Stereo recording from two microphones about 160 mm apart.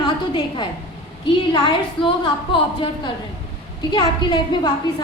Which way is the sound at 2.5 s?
30° left (ahead or behind).